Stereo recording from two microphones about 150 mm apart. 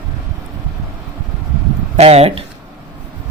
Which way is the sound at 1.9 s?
45° right (ahead or behind).